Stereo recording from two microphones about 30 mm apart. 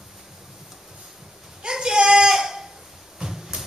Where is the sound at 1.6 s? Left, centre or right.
Right.